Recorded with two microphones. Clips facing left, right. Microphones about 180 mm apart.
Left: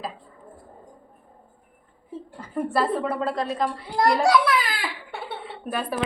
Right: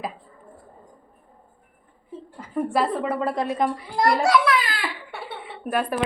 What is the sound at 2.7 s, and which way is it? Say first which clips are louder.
Speech: even; 10° right (ahead or behind).